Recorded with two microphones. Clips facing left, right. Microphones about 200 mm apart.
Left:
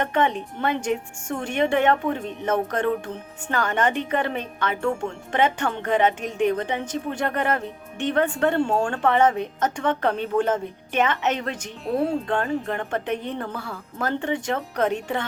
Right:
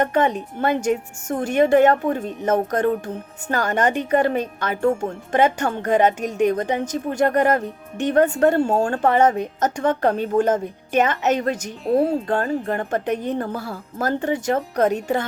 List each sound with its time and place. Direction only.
0.0 s speech: 40° right (ahead or behind)